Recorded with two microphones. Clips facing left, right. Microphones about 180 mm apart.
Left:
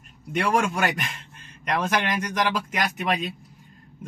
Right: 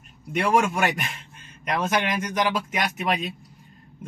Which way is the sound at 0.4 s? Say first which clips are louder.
Right 2 dB; 5° right (ahead or behind).